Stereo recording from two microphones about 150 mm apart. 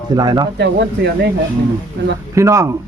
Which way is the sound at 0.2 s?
25° right (ahead or behind).